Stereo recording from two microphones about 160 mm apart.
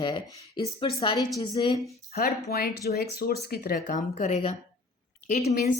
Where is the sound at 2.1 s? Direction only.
75° left (ahead or behind); by 5.7 s 45° left (ahead or behind).